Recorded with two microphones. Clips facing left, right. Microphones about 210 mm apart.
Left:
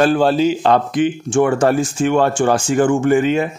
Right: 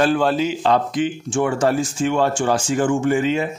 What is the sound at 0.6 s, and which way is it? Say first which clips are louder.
Speech: left 4 dB; 55° left (ahead or behind).